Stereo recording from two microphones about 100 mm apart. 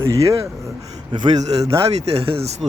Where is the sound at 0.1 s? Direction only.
30° right (ahead or behind).